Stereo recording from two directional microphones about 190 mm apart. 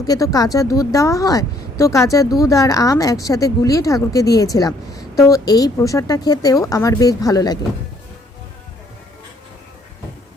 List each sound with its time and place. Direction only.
0.1 s a woman's voice: 20° left (ahead or behind)